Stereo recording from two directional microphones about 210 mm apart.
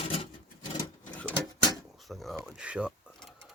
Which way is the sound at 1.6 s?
Centre (ahead or behind).